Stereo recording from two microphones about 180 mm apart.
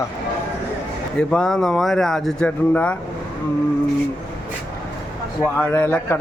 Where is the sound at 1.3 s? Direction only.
5° left (ahead or behind).